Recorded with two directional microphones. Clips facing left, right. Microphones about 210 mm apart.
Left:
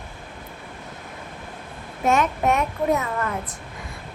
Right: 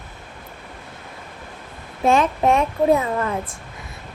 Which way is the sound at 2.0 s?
30° right (ahead or behind).